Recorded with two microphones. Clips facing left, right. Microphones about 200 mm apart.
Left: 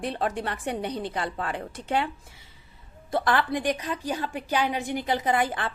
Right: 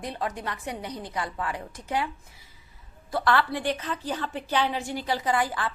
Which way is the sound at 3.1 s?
20° left (ahead or behind).